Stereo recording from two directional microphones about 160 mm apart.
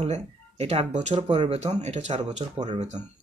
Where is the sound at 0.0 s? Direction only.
40° right (ahead or behind).